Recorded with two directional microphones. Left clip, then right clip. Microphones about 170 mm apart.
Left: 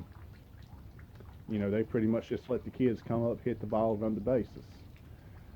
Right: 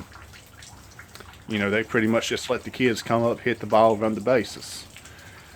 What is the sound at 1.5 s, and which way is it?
Speech, 25° right (ahead or behind).